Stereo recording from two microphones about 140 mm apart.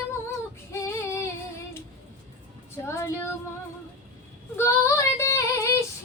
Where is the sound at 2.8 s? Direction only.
20° left (ahead or behind).